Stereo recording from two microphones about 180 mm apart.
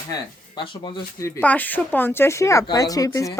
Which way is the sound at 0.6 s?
25° left (ahead or behind).